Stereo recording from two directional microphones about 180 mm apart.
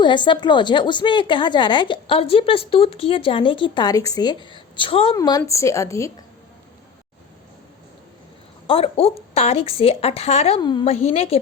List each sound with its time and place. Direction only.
0.0 s a woman's voice: 25° left (ahead or behind)
8.6 s a woman's voice: 30° left (ahead or behind)
10.8 s a woman's voice: 35° left (ahead or behind)